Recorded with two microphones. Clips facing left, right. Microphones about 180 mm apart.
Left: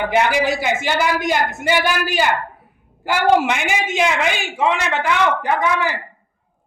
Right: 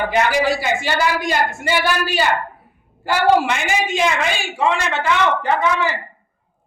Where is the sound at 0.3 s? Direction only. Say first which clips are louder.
Even; 20° left (ahead or behind).